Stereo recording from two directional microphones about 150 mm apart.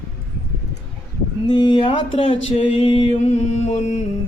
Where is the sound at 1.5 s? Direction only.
30° left (ahead or behind).